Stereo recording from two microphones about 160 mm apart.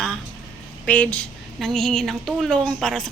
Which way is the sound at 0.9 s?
10° left (ahead or behind).